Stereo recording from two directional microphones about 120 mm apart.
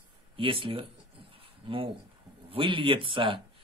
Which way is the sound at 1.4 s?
50° right (ahead or behind).